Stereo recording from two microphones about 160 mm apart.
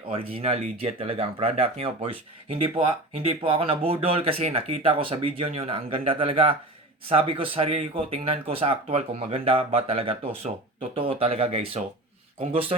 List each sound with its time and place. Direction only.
0.1 s speech: 35° right (ahead or behind)